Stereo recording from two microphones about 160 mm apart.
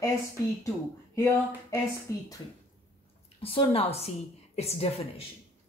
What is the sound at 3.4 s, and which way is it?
A woman's voice, 35° left (ahead or behind).